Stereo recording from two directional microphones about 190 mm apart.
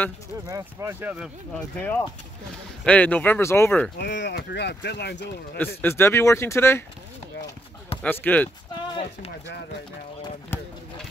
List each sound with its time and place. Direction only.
0.5 s speech: 15° right (ahead or behind)
1.8 s speech: 10° left (ahead or behind)
4.0 s speech: 65° left (ahead or behind)
5.8 s speech: 10° left (ahead or behind)
8.0 s speech: 10° left (ahead or behind)